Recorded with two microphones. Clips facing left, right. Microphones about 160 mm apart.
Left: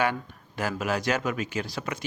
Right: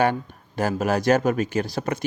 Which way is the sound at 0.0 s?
45° right (ahead or behind).